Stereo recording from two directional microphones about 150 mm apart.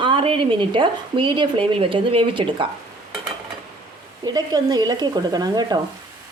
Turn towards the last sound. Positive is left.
turn(degrees=-25)  # may be behind; listen again after turning